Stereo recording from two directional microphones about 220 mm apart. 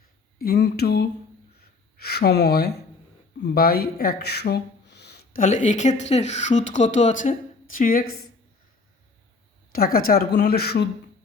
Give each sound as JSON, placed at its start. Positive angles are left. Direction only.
{"t": 0.3, "sound": "a woman's voice", "side_deg": 45}
{"t": 9.7, "sound": "a woman's voice", "side_deg": 40}